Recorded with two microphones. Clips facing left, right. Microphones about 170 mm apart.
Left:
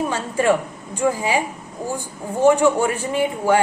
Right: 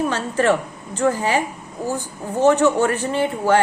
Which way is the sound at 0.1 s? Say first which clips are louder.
Even; 15° left (ahead or behind).